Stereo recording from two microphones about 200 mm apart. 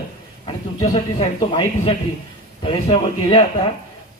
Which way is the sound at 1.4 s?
25° left (ahead or behind).